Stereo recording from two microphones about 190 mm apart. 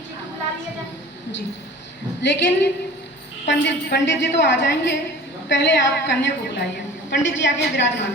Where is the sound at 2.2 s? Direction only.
70° left (ahead or behind).